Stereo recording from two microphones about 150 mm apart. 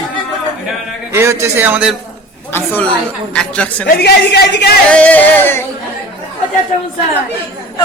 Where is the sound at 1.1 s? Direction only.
20° right (ahead or behind).